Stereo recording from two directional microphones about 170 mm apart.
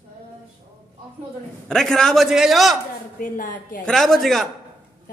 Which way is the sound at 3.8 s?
Centre (ahead or behind).